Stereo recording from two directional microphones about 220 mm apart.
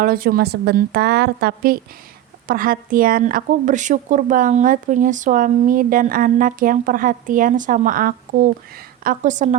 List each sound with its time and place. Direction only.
0.0 s a woman's voice: 40° right (ahead or behind)